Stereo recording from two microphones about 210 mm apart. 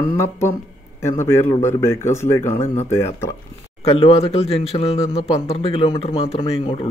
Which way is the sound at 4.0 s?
30° left (ahead or behind).